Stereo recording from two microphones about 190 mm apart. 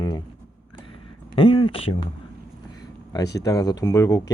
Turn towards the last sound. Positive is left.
turn(degrees=20)  # may be behind; listen again after turning